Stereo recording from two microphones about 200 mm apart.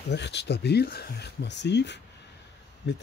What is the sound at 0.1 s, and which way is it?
Speech, 60° left (ahead or behind).